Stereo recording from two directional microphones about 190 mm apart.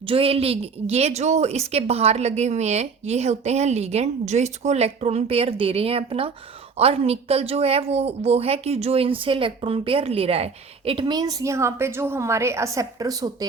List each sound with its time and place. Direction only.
0.1 s a woman's voice: 30° right (ahead or behind)